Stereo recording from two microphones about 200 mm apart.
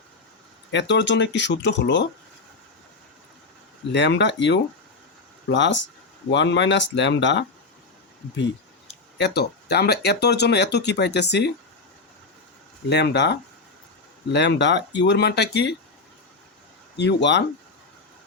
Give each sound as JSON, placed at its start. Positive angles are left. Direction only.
{"t": 0.7, "sound": "speech", "side_deg": 60}
{"t": 3.9, "sound": "speech", "side_deg": 60}
{"t": 9.1, "sound": "speech", "side_deg": 55}
{"t": 12.9, "sound": "speech", "side_deg": 60}
{"t": 17.0, "sound": "speech", "side_deg": 60}